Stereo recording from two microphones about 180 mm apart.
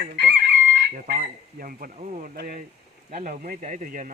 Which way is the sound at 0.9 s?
50° right (ahead or behind).